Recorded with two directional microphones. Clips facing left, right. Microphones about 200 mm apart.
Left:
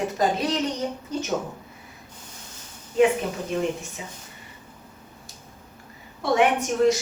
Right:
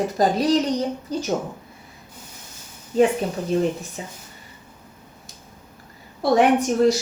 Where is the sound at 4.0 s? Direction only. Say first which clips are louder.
Right 4 dB; 40° right (ahead or behind).